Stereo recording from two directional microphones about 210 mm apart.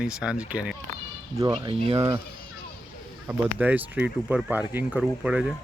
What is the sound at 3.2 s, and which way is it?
Speech, 10° right (ahead or behind).